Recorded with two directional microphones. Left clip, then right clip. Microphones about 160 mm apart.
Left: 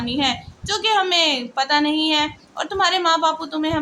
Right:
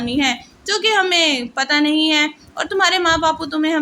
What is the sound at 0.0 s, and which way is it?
A woman's voice, 15° right (ahead or behind).